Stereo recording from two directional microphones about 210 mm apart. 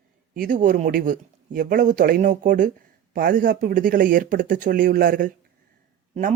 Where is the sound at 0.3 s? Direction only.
40° right (ahead or behind).